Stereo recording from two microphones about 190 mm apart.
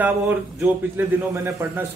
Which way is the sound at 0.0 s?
5° right (ahead or behind).